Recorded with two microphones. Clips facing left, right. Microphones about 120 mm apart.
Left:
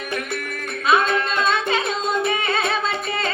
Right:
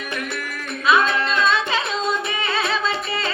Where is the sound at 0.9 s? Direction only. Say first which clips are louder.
Even; 45° left (ahead or behind).